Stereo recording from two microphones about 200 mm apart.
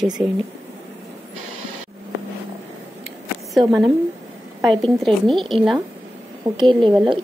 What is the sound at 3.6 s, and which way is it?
Speech, 25° right (ahead or behind).